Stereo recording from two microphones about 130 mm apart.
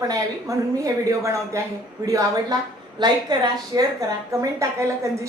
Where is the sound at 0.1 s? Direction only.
25° right (ahead or behind).